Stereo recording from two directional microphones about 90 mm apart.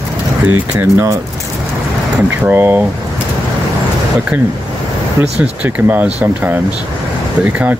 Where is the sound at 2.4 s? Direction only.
20° right (ahead or behind).